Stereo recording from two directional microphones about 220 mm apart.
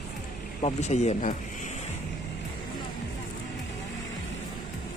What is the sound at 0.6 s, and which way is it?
Speech, 30° left (ahead or behind).